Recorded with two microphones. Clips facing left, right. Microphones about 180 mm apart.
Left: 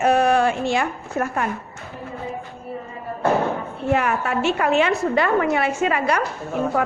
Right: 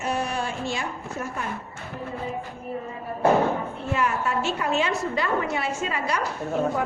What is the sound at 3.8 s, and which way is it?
A woman's voice, 65° left (ahead or behind).